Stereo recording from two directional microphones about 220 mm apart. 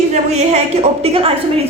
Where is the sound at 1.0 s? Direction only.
25° right (ahead or behind).